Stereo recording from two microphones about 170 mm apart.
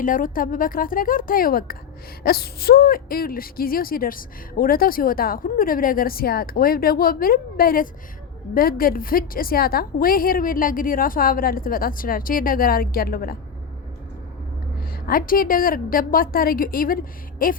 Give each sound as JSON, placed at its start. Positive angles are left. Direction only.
{"t": 0.0, "sound": "speech", "side_deg": 55}
{"t": 14.8, "sound": "speech", "side_deg": 60}